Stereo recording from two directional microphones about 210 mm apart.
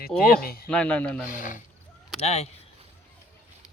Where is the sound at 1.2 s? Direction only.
40° left (ahead or behind).